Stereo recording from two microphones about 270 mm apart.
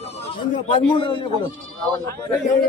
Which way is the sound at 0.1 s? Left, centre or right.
Left.